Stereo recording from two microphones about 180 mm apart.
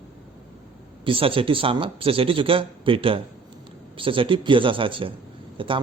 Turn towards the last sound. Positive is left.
turn(degrees=-30)  # may be behind; listen again after turning